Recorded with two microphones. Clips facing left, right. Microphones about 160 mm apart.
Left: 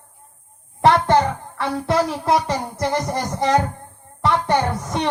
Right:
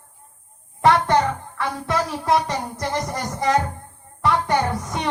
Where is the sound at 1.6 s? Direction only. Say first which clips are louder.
Left 5 dB; 30° left (ahead or behind).